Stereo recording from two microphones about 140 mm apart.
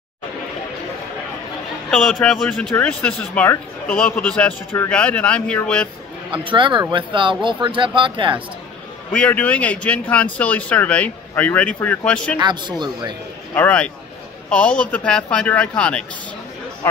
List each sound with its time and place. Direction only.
1.9 s speech: centre (ahead or behind)
6.4 s speech: 35° right (ahead or behind)
9.1 s speech: 10° left (ahead or behind)
12.4 s speech: 30° right (ahead or behind)
13.6 s speech: 10° left (ahead or behind)